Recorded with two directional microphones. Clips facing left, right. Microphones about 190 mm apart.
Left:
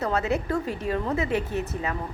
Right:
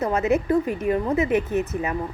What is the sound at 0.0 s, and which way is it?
A woman's voice, 20° right (ahead or behind).